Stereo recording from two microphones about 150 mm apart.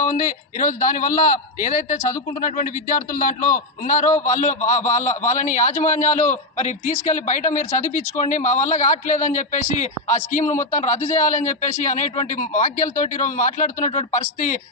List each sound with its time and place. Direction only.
0.0 s a man's voice: 60° left (ahead or behind)